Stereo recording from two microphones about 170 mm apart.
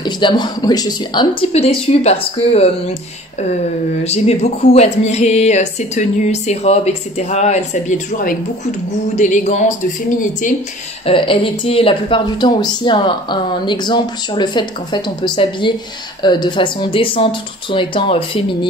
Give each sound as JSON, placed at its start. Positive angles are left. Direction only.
{"t": 0.0, "sound": "speech", "side_deg": 25}
{"t": 11.1, "sound": "speech", "side_deg": 30}